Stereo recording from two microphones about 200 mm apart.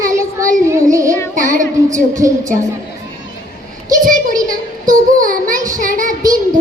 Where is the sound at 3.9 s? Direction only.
40° right (ahead or behind).